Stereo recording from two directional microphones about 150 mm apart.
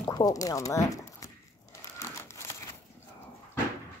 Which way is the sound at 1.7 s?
20° left (ahead or behind).